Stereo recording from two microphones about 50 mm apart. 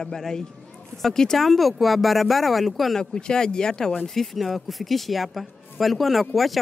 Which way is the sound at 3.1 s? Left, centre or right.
Centre.